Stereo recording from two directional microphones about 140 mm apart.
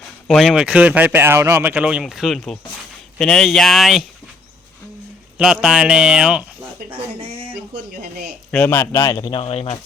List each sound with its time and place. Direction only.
0.3 s a man's voice: centre (ahead or behind)
5.4 s a man's voice: 5° right (ahead or behind)
8.4 s speech: 10° left (ahead or behind); by 9.4 s 25° left (ahead or behind)
9.4 s speech: 45° left (ahead or behind)